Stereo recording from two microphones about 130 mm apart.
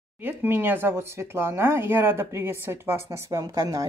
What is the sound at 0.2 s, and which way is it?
A woman's voice, 15° right (ahead or behind).